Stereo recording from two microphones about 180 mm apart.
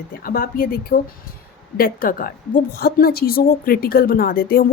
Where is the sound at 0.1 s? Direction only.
55° left (ahead or behind).